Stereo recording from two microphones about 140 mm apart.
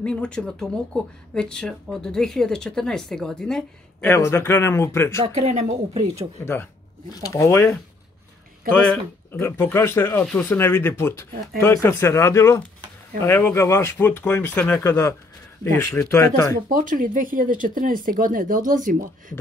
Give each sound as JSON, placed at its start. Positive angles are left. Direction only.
{"t": 0.0, "sound": "speech", "side_deg": 5}
{"t": 4.1, "sound": "speech", "side_deg": 20}
{"t": 5.2, "sound": "speech", "side_deg": -45}
{"t": 6.4, "sound": "speech", "side_deg": 15}
{"t": 8.8, "sound": "speech", "side_deg": 15}
{"t": 14.9, "sound": "speech", "side_deg": 25}
{"t": 16.6, "sound": "speech", "side_deg": -70}